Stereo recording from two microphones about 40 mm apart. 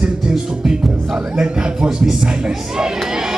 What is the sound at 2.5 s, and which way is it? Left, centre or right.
Speech, centre.